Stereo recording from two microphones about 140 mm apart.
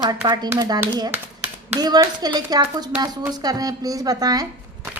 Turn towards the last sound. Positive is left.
turn(degrees=-25)  # may be behind; listen again after turning